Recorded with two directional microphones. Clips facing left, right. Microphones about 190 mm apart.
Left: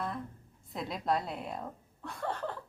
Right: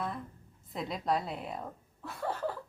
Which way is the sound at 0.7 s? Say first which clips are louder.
Even; centre (ahead or behind).